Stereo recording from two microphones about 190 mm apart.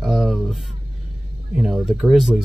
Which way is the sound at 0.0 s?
Centre (ahead or behind).